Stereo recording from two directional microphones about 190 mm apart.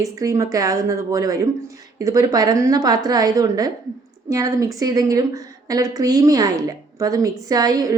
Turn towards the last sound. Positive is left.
turn(degrees=-20)  # may be behind; listen again after turning